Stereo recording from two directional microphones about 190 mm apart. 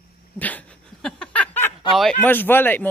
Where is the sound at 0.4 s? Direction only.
10° left (ahead or behind).